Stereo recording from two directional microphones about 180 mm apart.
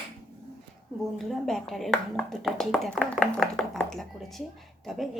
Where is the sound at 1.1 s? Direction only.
Centre (ahead or behind).